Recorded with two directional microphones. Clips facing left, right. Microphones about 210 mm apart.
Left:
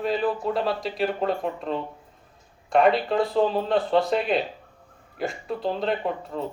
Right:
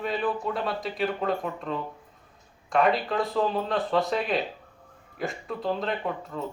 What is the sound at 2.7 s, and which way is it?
Speech, centre (ahead or behind).